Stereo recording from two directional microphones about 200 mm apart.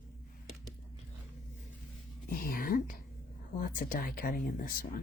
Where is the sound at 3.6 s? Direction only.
45° left (ahead or behind).